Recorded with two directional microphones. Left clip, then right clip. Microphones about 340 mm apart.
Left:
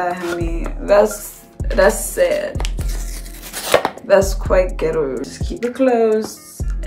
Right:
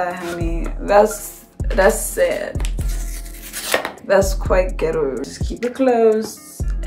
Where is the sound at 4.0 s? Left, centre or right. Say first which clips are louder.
Left 2 dB; centre.